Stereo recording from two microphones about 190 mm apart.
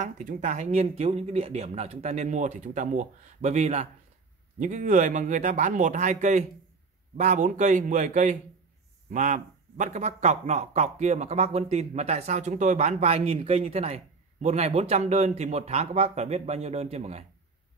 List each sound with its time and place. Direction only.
0.0 s speech: 40° right (ahead or behind)